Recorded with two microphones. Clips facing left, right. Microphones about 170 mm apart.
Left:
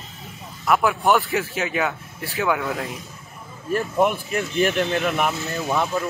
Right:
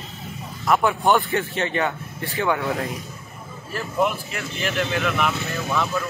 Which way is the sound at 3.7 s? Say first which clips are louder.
Left 3 dB; 45° left (ahead or behind).